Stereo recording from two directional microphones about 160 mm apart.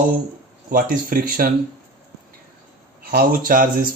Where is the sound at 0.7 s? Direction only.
65° right (ahead or behind).